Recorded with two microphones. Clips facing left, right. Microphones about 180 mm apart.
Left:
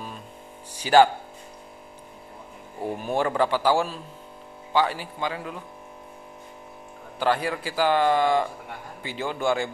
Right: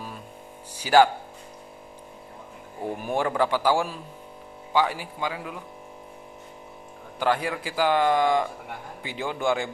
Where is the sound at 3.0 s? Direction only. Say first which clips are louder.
Left 1 dB; 15° right (ahead or behind).